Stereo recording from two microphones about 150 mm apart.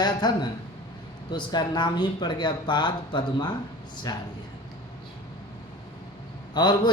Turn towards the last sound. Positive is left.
turn(degrees=30)  # may be behind; listen again after turning